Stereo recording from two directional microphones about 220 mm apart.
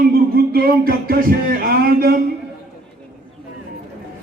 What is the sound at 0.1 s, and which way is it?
Music, 45° right (ahead or behind).